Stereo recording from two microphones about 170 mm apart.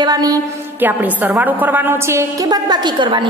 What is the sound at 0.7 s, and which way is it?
A woman's voice, 10° right (ahead or behind).